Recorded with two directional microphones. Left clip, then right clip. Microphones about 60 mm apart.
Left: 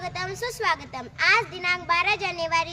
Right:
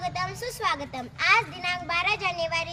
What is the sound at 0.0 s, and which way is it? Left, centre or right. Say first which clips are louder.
Speech: even; left.